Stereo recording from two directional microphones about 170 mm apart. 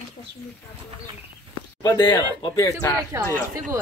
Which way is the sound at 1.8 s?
20° left (ahead or behind).